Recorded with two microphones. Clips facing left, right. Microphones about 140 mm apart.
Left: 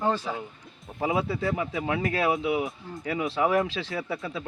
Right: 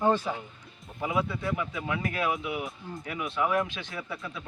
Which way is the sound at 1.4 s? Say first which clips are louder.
Left 4 dB; 30° left (ahead or behind).